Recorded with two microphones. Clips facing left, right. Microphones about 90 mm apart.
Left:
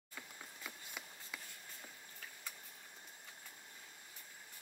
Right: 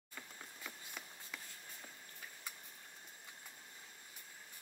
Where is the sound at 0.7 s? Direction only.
10° left (ahead or behind).